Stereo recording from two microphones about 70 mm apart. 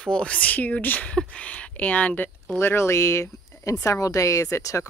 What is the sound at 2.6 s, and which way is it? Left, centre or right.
Speech, left.